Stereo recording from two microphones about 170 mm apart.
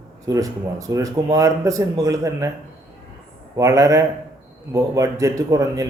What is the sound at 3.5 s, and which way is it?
Speech, 20° right (ahead or behind).